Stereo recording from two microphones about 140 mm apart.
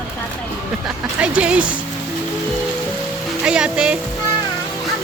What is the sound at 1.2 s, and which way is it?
Speech, 10° right (ahead or behind).